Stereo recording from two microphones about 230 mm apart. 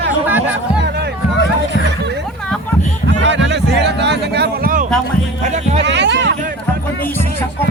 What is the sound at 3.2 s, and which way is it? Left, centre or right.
Music, right.